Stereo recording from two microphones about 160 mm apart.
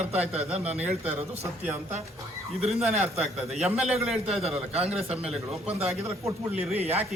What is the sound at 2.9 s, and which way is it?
Speech, 45° right (ahead or behind).